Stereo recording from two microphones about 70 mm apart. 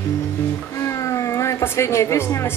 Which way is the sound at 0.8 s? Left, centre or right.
Left.